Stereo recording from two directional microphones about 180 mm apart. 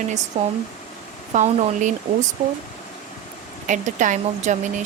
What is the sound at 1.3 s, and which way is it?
Speech, 40° right (ahead or behind).